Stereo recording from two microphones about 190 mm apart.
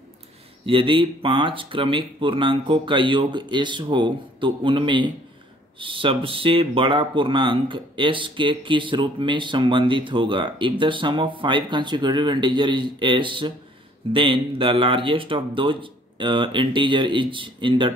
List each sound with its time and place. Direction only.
0.7 s speech: 25° right (ahead or behind)